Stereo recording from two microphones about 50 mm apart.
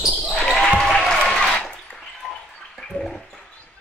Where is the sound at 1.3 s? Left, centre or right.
Centre.